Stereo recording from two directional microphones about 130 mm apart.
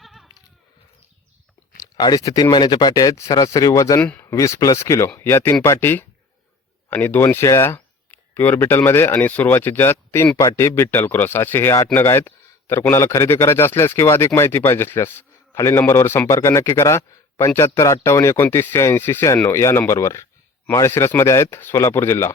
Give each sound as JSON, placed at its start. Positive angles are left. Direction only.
{"t": 0.0, "sound": "bleat", "side_deg": 0}
{"t": 1.7, "sound": "speech", "side_deg": 30}